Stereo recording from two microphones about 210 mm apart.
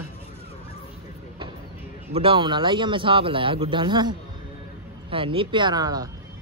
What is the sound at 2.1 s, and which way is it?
Speech, 25° right (ahead or behind).